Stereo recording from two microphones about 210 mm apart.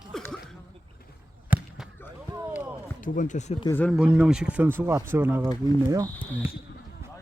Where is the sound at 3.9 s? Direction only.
5° right (ahead or behind).